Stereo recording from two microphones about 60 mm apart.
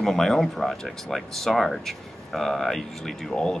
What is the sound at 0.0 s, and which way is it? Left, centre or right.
Speech, centre.